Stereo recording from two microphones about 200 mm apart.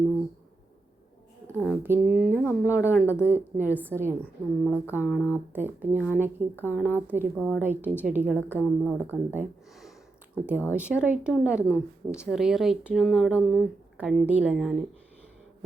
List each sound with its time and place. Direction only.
1.5 s speech: 5° right (ahead or behind)